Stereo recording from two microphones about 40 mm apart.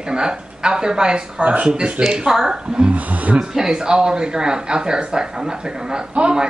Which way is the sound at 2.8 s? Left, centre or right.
Right.